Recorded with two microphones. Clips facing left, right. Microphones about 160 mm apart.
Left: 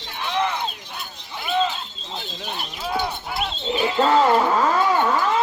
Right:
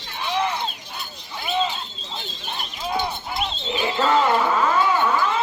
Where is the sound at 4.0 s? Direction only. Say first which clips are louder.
Left 2 dB; 35° left (ahead or behind).